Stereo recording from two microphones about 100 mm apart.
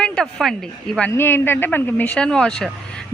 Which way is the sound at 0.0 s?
5° left (ahead or behind).